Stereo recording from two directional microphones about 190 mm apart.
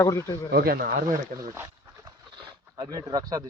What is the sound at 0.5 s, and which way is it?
Speech, 50° right (ahead or behind).